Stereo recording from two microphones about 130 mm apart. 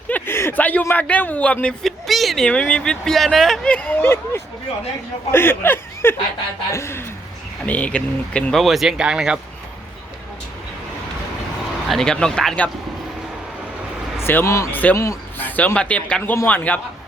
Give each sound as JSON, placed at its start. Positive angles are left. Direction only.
{"t": 0.1, "sound": "a man's voice", "side_deg": 20}
{"t": 11.9, "sound": "speech", "side_deg": 5}
{"t": 14.3, "sound": "a man's voice", "side_deg": 20}